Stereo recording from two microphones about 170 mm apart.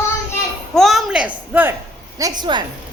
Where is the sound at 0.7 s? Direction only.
Centre (ahead or behind).